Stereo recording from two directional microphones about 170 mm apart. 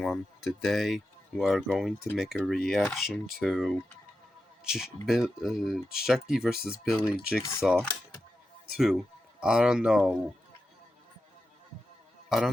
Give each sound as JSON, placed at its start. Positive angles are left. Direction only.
{"t": 0.0, "sound": "speech", "side_deg": 0}